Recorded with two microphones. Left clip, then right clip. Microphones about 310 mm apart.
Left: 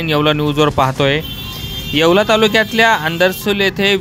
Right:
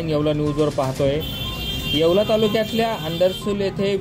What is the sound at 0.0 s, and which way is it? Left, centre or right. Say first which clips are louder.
Speech: left 6 dB; left.